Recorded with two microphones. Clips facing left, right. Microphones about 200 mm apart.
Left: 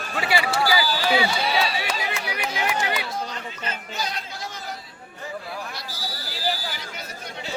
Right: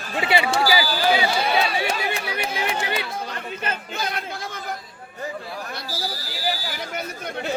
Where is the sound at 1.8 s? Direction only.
30° right (ahead or behind).